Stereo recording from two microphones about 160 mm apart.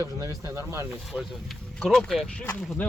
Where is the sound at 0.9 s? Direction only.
5° right (ahead or behind).